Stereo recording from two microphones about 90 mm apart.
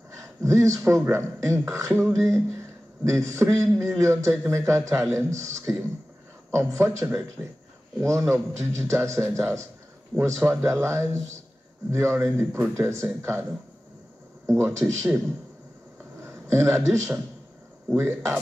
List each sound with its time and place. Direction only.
0.2 s a man's voice: 35° right (ahead or behind)
16.2 s a man's voice: 30° right (ahead or behind)